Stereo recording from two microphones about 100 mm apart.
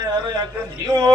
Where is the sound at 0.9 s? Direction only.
45° right (ahead or behind).